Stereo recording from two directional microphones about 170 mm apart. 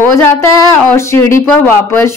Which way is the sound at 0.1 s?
15° left (ahead or behind).